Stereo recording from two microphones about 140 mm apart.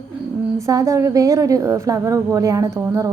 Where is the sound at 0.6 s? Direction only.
20° right (ahead or behind).